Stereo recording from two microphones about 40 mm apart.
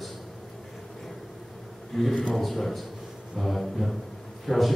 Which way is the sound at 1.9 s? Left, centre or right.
Centre.